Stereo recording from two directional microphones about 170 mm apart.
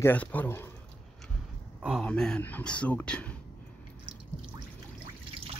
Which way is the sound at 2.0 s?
5° left (ahead or behind).